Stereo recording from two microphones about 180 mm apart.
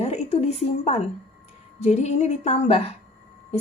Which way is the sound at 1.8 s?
40° left (ahead or behind).